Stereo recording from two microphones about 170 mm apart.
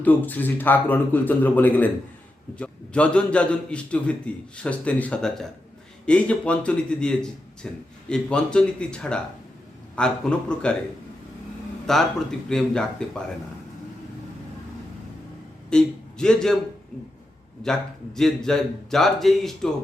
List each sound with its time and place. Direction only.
0.0 s a man's voice: 10° left (ahead or behind)
11.9 s a man's voice: 5° left (ahead or behind)
15.7 s a man's voice: 5° left (ahead or behind)
17.6 s a man's voice: 5° left (ahead or behind)